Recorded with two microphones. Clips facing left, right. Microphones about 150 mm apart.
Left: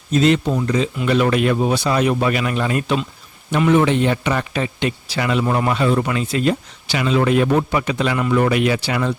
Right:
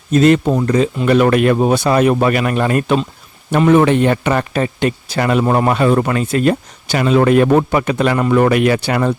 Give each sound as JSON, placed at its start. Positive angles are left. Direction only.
{"t": 0.1, "sound": "a man's voice", "side_deg": -50}